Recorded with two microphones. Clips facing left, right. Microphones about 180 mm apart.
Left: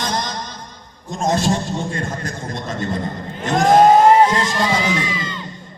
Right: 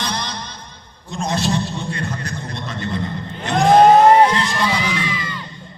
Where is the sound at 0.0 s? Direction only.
45° left (ahead or behind).